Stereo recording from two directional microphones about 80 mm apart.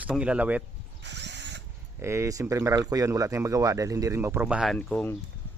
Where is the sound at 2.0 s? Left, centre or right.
Right.